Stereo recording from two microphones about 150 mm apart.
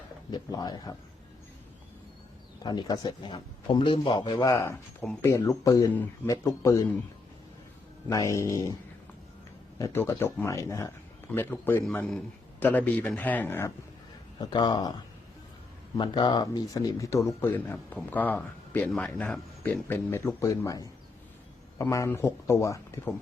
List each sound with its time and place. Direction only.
0.3 s speech: 25° left (ahead or behind)
2.6 s a man's voice: 25° left (ahead or behind)
4.5 s a man's voice: 15° left (ahead or behind)
8.1 s speech: 20° left (ahead or behind)
9.7 s a man's voice: 20° left (ahead or behind)
14.3 s speech: 30° left (ahead or behind)
16.0 s speech: 30° left (ahead or behind); by 19.8 s 5° left (ahead or behind)
19.9 s speech: 15° left (ahead or behind)